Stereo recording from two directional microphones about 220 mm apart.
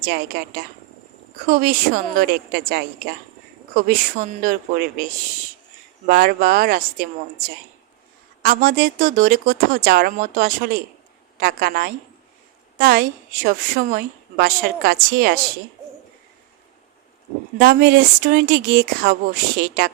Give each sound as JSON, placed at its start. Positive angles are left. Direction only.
{"t": 0.0, "sound": "a woman's voice", "side_deg": -40}
{"t": 6.1, "sound": "a woman's voice", "side_deg": -40}
{"t": 8.4, "sound": "a woman's voice", "side_deg": -40}
{"t": 17.6, "sound": "a woman's voice", "side_deg": -40}